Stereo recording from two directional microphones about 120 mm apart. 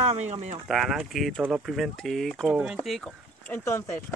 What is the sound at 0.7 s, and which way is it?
Speech, 5° right (ahead or behind).